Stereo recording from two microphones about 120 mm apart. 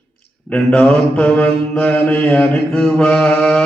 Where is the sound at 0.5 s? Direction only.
10° left (ahead or behind).